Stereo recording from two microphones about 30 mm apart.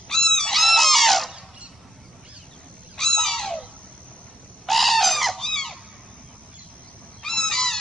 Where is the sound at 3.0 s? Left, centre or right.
Centre.